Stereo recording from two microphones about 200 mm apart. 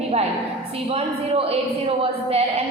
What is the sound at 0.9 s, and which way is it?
Speech, 30° right (ahead or behind).